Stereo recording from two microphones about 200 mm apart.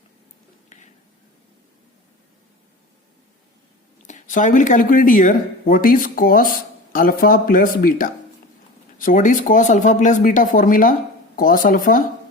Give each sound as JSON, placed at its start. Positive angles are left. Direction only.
{"t": 4.0, "sound": "speech", "side_deg": 40}